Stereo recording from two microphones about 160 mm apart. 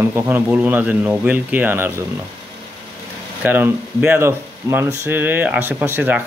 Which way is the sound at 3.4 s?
10° right (ahead or behind).